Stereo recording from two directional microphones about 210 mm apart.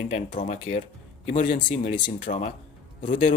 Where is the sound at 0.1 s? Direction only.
35° left (ahead or behind).